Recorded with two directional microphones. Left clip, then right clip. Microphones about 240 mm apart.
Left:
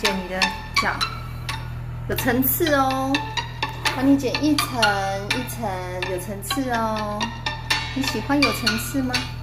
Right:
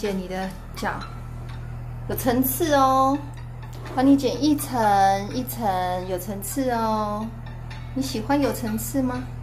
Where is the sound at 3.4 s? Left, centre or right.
Left.